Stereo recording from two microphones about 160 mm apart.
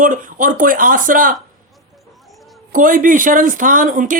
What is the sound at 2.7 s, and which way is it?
Speech, 60° right (ahead or behind).